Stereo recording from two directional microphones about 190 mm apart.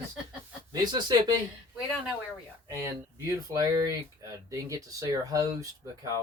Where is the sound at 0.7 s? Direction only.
20° right (ahead or behind).